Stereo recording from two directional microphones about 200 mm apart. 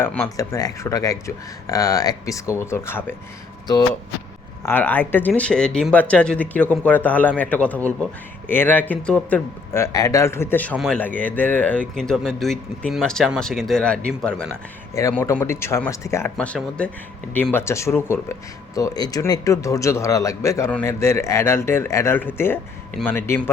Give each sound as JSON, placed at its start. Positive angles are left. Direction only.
{"t": 0.0, "sound": "speech", "side_deg": 10}
{"t": 4.6, "sound": "speech", "side_deg": 10}
{"t": 14.9, "sound": "speech", "side_deg": 15}